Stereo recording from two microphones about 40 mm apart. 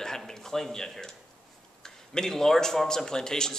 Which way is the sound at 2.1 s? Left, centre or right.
Centre.